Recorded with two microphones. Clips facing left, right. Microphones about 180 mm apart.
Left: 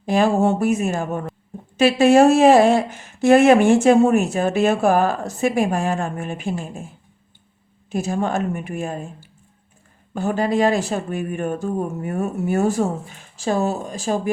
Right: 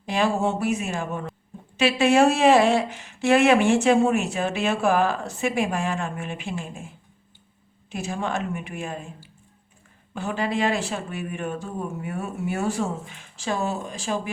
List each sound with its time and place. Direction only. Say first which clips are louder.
0.0 s speech: left 6 dB; 45° left (ahead or behind)
7.9 s speech: left 6 dB; 40° left (ahead or behind)
10.2 s speech: left 6 dB; 45° left (ahead or behind)